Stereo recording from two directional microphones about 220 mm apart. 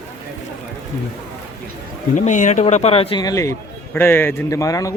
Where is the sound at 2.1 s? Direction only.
35° left (ahead or behind); by 4.9 s 15° left (ahead or behind).